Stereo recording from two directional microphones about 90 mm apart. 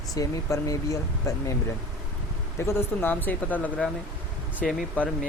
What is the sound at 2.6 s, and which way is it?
Speech, 30° left (ahead or behind).